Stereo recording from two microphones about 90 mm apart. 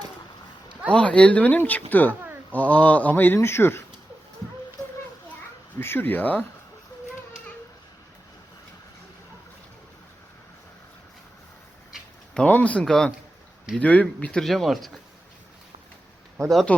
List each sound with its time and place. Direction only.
0.9 s speech: 15° left (ahead or behind)
5.8 s speech: 25° left (ahead or behind)
12.3 s speech: 15° left (ahead or behind)